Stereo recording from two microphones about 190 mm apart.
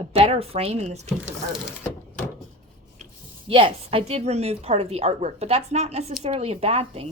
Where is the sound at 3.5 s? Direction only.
30° right (ahead or behind).